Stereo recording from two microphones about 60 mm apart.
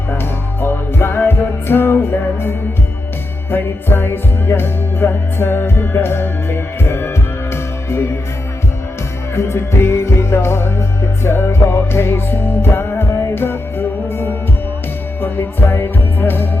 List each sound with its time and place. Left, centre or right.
0.1 s music: left
9.3 s music: left